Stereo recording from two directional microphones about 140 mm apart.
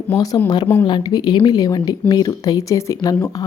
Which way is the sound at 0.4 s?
30° left (ahead or behind).